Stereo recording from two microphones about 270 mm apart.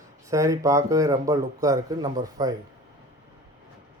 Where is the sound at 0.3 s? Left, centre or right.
Centre.